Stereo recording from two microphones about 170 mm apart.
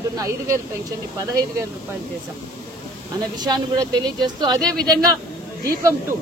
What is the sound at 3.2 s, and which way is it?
Speech, 25° right (ahead or behind).